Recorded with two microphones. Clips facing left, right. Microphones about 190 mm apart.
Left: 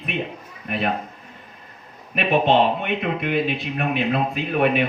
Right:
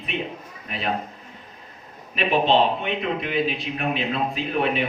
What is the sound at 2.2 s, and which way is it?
Speech, 55° left (ahead or behind).